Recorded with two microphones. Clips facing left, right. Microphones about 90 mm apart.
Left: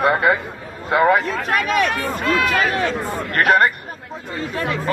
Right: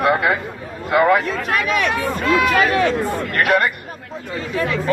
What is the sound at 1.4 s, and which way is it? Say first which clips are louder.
Speech: left 1 dB; 40° left (ahead or behind).